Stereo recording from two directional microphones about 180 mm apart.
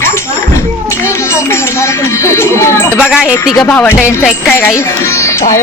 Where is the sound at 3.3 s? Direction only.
20° left (ahead or behind).